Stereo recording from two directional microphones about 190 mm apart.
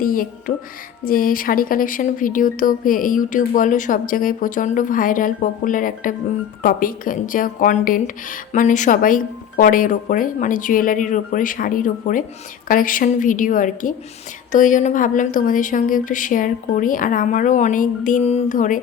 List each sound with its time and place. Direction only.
0.0 s speech: 50° left (ahead or behind)